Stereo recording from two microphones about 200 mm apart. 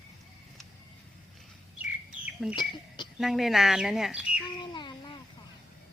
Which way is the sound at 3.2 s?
Centre (ahead or behind).